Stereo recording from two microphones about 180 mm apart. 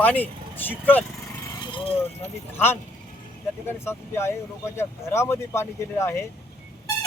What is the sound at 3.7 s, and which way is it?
Speech, 15° left (ahead or behind).